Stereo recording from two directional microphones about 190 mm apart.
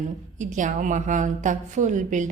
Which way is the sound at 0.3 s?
40° right (ahead or behind).